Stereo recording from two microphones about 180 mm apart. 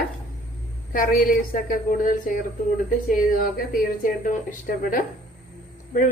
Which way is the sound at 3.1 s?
55° left (ahead or behind).